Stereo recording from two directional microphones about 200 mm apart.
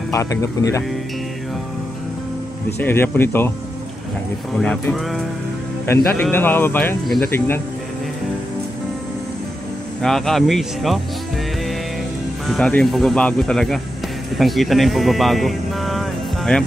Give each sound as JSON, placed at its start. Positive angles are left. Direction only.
{"t": 0.1, "sound": "speech", "side_deg": 15}
{"t": 2.8, "sound": "speech", "side_deg": 10}
{"t": 4.6, "sound": "speech", "side_deg": 5}
{"t": 6.2, "sound": "speech", "side_deg": 10}
{"t": 10.0, "sound": "speech", "side_deg": 0}
{"t": 12.4, "sound": "speech", "side_deg": 5}